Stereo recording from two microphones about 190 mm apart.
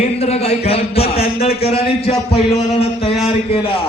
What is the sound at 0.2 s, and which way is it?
A man's voice, 30° left (ahead or behind).